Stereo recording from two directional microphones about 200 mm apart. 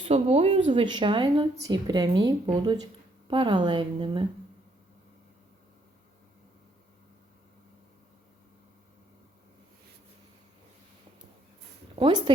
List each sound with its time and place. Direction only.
0.0 s a woman's voice: 30° right (ahead or behind)
11.9 s a woman's voice: 25° right (ahead or behind)